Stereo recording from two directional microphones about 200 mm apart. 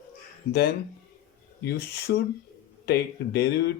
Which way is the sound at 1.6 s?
55° left (ahead or behind).